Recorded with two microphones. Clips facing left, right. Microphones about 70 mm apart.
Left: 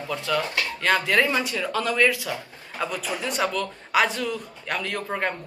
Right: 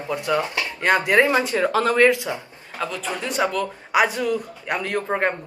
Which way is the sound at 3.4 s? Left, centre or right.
Centre.